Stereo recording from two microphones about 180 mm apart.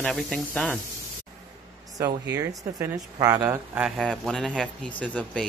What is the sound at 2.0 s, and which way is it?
Speech, 15° right (ahead or behind).